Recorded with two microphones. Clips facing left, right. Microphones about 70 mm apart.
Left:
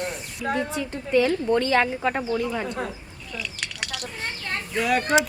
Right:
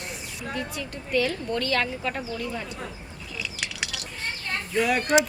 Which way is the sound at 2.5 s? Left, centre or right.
Left.